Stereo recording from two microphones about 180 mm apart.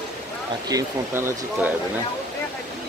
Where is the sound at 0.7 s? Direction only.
15° right (ahead or behind).